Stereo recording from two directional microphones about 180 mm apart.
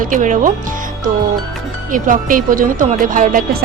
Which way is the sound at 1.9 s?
50° right (ahead or behind).